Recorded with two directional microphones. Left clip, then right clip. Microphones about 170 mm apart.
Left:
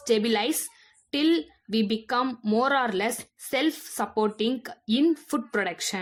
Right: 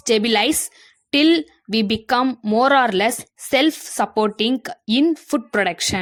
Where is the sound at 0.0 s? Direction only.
40° right (ahead or behind).